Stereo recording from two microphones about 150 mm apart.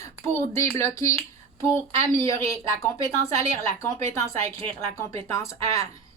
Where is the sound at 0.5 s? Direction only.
20° left (ahead or behind).